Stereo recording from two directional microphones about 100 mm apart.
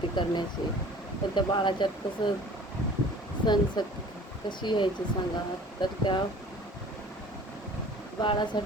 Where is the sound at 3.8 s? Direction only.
45° left (ahead or behind).